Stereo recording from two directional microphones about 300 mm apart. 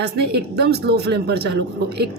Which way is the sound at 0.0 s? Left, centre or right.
Right.